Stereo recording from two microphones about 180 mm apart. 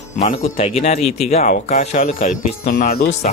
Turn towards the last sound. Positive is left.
turn(degrees=55)  # may be behind; listen again after turning